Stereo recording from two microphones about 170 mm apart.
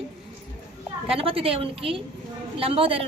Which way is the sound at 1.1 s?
35° right (ahead or behind).